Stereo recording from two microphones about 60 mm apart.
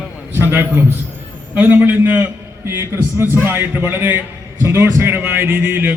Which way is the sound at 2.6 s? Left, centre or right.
Right.